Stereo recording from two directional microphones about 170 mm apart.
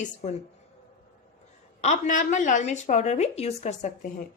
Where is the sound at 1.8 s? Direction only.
45° left (ahead or behind).